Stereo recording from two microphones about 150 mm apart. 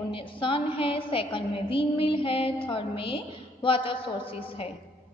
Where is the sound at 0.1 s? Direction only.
35° left (ahead or behind).